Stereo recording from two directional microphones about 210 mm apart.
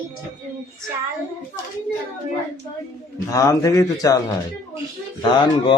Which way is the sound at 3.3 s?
15° left (ahead or behind).